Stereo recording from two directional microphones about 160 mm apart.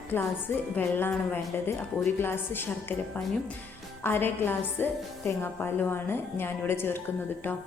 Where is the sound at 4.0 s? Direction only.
15° left (ahead or behind).